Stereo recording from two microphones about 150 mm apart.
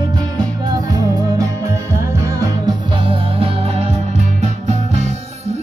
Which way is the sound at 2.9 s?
35° right (ahead or behind).